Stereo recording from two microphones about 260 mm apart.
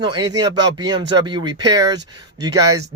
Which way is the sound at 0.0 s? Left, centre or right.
Centre.